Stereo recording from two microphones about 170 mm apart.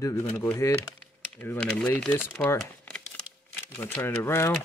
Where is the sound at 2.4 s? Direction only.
5° left (ahead or behind).